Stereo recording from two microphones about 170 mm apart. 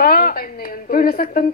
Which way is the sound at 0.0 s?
60° left (ahead or behind).